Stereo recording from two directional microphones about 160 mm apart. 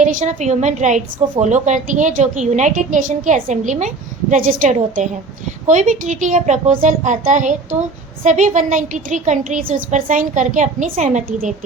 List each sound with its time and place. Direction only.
0.0 s a woman's voice: 50° right (ahead or behind)